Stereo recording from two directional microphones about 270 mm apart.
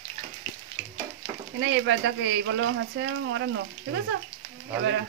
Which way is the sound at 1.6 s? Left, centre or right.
Right.